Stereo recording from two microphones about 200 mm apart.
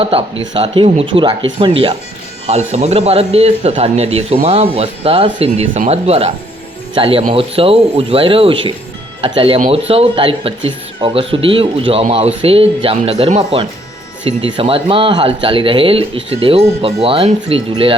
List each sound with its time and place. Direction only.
0.0 s speech: 30° right (ahead or behind)